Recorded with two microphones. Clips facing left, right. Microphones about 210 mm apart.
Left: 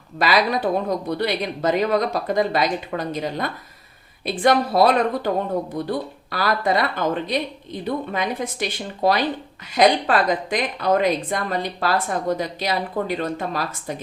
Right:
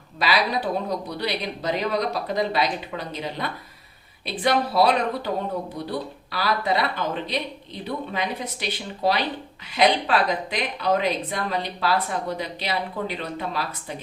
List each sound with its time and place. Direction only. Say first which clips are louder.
0.2 s speech: left 4 dB; 50° left (ahead or behind)